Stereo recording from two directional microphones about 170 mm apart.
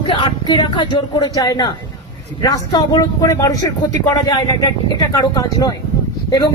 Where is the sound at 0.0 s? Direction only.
30° left (ahead or behind).